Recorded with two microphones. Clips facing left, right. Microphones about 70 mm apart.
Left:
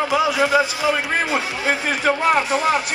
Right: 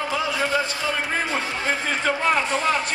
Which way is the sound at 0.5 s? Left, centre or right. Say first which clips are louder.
Left 6 dB; left.